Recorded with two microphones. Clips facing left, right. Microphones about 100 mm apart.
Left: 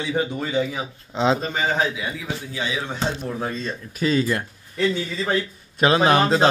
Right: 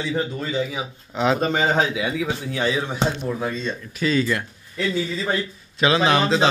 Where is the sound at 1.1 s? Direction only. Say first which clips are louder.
Even; 25° left (ahead or behind).